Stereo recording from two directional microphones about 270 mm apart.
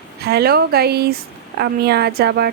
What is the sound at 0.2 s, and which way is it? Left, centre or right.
A woman's voice, right.